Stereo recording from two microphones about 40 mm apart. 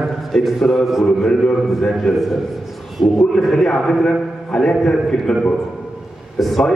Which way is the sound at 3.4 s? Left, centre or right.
Centre.